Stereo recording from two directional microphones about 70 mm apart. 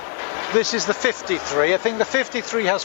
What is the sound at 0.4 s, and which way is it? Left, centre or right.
Speech, centre.